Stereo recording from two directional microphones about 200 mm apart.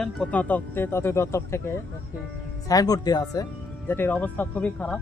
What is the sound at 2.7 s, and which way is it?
Speech, 20° left (ahead or behind).